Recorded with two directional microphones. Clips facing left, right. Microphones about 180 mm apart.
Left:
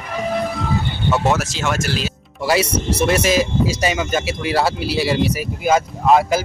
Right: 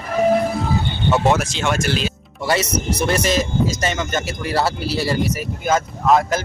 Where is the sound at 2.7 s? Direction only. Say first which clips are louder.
Left 2 dB; 30° left (ahead or behind).